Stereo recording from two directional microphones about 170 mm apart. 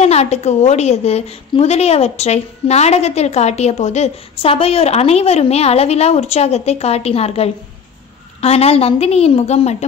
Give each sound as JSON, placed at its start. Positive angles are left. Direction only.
{"t": 0.0, "sound": "a woman's voice", "side_deg": 40}